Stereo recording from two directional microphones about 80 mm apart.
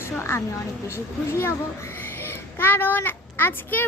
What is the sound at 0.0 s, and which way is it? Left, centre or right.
A woman's voice, left.